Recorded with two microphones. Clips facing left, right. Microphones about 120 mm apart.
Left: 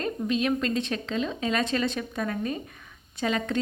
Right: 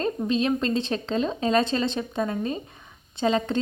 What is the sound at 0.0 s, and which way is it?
A woman's voice, 30° right (ahead or behind).